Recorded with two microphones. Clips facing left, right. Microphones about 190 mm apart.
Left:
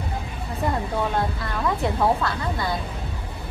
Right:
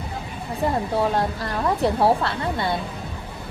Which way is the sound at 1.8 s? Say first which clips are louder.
Right 3 dB; 30° right (ahead or behind).